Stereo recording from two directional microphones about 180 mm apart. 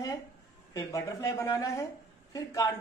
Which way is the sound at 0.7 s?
20° left (ahead or behind).